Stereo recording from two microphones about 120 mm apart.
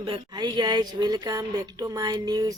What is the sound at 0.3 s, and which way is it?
Speech, 35° right (ahead or behind).